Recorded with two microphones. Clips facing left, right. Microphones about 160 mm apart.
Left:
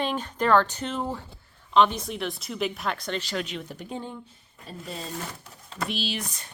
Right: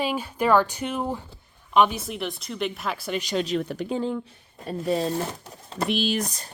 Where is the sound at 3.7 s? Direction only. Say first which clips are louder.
Right 9 dB; 90° right.